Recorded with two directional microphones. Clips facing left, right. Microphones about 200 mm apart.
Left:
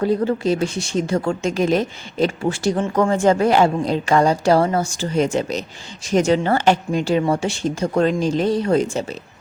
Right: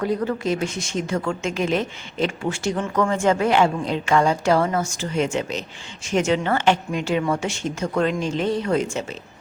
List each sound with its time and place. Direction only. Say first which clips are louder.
0.0 s a woman's voice: left 4 dB; 30° left (ahead or behind)